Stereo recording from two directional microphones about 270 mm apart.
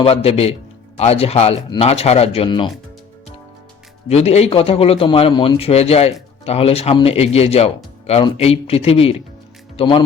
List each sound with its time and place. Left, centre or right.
0.0 s a man's voice: left
4.1 s a man's voice: left